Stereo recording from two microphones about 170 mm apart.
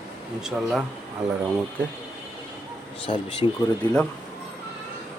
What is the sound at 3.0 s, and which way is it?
Speech, 30° left (ahead or behind).